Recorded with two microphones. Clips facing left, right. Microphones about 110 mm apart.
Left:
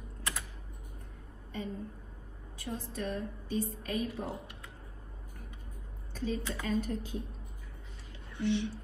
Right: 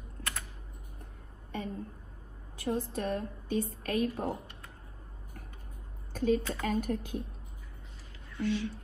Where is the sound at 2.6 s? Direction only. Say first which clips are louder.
Right 5 dB; 50° right (ahead or behind).